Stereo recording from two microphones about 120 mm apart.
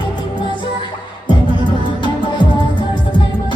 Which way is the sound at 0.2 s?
40° left (ahead or behind).